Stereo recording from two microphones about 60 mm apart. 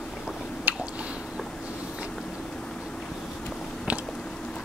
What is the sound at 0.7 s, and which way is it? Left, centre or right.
Squish, right.